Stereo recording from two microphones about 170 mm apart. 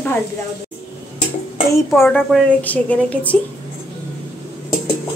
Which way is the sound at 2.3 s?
5° left (ahead or behind).